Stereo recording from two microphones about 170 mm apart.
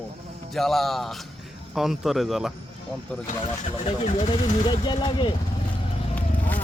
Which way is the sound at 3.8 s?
35° left (ahead or behind).